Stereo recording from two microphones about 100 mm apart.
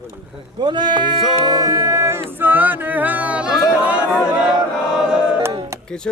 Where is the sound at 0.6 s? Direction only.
45° right (ahead or behind).